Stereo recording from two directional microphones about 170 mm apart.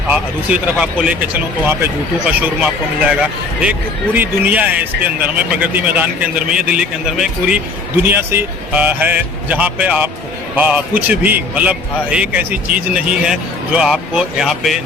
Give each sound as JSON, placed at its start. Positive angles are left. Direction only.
{"t": 0.1, "sound": "a man's voice", "side_deg": -5}
{"t": 2.2, "sound": "a man's voice", "side_deg": -5}